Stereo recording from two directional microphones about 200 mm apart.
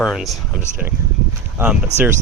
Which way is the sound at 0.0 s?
Centre (ahead or behind).